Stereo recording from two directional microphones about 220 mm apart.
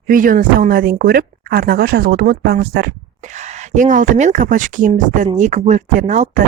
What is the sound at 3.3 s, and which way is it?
Speech, 30° right (ahead or behind).